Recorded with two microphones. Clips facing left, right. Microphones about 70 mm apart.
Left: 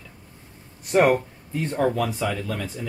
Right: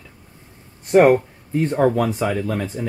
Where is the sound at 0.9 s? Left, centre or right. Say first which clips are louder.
Right 6 dB; right.